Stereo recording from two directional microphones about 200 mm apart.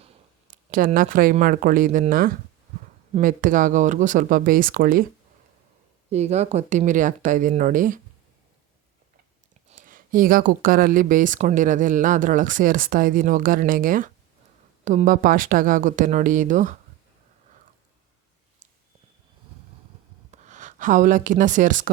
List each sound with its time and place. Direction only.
0.5 s speech: 40° right (ahead or behind)
6.1 s speech: 35° right (ahead or behind)
9.6 s speech: 40° right (ahead or behind)
20.3 s speech: 35° right (ahead or behind)